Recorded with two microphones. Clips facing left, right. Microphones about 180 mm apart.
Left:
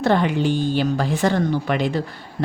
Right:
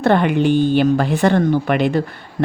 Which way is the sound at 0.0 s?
60° right (ahead or behind).